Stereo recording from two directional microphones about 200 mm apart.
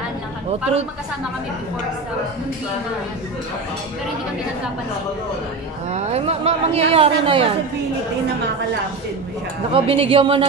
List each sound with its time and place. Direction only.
5.9 s speech: 30° right (ahead or behind)
9.7 s speech: 25° right (ahead or behind)